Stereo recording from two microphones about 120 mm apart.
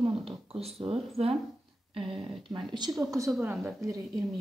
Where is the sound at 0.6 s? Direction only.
50° right (ahead or behind).